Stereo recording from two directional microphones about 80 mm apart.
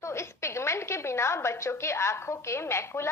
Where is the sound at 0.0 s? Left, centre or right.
Left.